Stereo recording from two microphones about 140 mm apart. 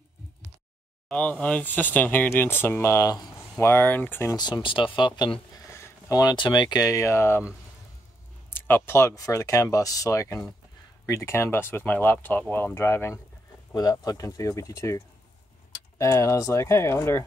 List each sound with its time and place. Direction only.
1.0 s speech: 10° left (ahead or behind)
4.4 s speech: 30° left (ahead or behind)
5.7 s speech: 20° left (ahead or behind)